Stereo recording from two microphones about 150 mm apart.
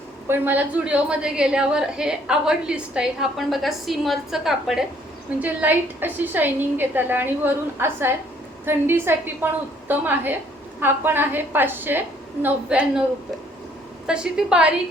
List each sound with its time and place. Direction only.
0.3 s a woman's voice: 10° right (ahead or behind)
14.1 s a woman's voice: 5° right (ahead or behind)